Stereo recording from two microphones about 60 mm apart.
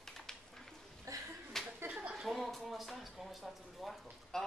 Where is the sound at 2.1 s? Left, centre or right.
Centre.